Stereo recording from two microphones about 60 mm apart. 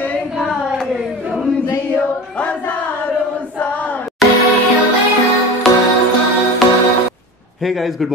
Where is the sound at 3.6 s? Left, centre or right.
Left.